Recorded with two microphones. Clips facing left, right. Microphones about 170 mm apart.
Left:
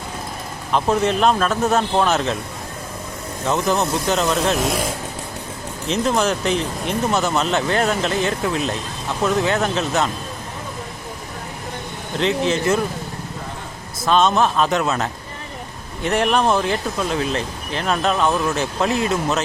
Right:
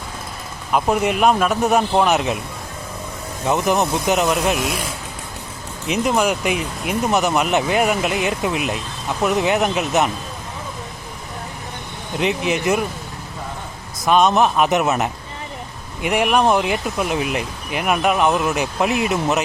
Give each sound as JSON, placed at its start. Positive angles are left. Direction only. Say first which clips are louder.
{"t": 0.7, "sound": "speech", "louder": "even", "side_deg": -15}
{"t": 3.4, "sound": "speech", "louder": "right 1 dB", "side_deg": -15}
{"t": 5.9, "sound": "speech", "louder": "right 1 dB", "side_deg": -15}
{"t": 12.2, "sound": "speech", "louder": "left 1 dB", "side_deg": -15}
{"t": 14.0, "sound": "speech", "louder": "right 1 dB", "side_deg": -15}